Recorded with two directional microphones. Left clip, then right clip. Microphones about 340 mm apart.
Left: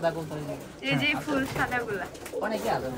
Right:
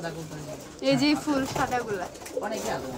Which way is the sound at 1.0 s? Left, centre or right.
Centre.